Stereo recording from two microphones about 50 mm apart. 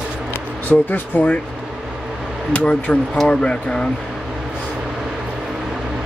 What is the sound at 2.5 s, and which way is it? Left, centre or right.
Speech, left.